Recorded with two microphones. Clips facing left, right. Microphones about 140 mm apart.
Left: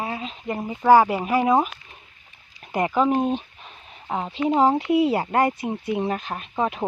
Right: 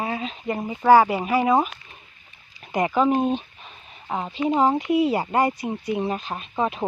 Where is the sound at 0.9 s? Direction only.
10° right (ahead or behind).